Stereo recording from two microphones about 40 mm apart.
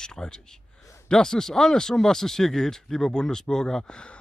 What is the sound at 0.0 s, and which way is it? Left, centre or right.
Speech, centre.